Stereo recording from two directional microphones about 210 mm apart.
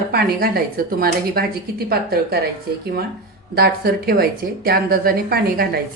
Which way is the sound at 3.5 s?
45° right (ahead or behind).